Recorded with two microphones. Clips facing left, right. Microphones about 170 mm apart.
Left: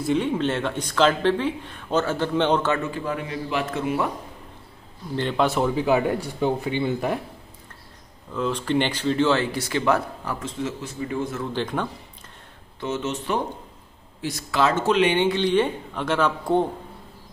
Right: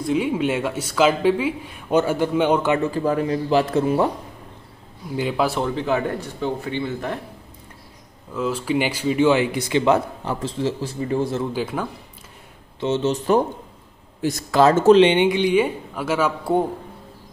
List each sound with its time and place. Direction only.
0.0 s speech: 5° right (ahead or behind)
2.9 s a man's voice: 40° right (ahead or behind)
5.1 s speech: 5° right (ahead or behind); by 7.2 s 15° left (ahead or behind)
8.3 s speech: 5° right (ahead or behind); by 11.4 s 35° right (ahead or behind)
11.5 s speech: 5° right (ahead or behind)
12.8 s a man's voice: 30° right (ahead or behind)
15.0 s speech: 20° right (ahead or behind)